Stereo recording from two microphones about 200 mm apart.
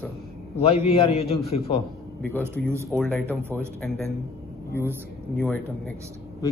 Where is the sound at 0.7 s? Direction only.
30° left (ahead or behind).